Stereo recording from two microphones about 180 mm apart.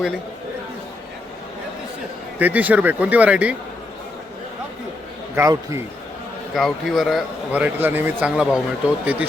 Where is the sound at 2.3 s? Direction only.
10° right (ahead or behind).